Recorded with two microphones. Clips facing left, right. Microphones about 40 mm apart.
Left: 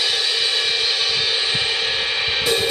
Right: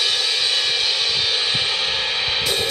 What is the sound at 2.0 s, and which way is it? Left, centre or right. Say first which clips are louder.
Music: left 1 dB; centre.